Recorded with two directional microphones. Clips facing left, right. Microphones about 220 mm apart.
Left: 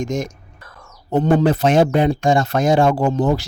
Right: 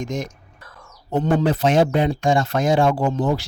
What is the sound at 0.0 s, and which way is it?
Speech, 45° left (ahead or behind).